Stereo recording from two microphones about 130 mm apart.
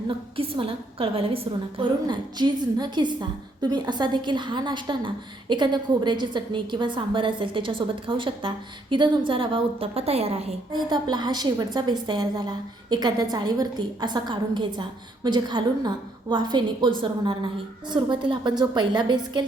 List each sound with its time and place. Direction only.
0.1 s a woman's voice: 45° right (ahead or behind)
10.7 s a woman's voice: 35° right (ahead or behind)